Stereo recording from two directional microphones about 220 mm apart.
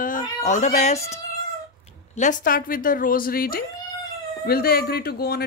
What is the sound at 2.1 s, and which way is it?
A woman's voice, 35° left (ahead or behind).